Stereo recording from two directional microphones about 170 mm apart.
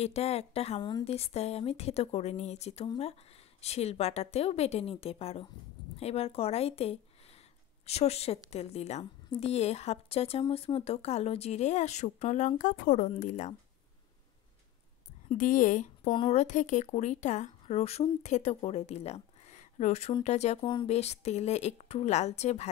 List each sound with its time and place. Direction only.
0.0 s speech: 40° left (ahead or behind)
15.3 s speech: 50° left (ahead or behind)
20.6 s speech: 25° left (ahead or behind)
20.9 s speech: 40° left (ahead or behind)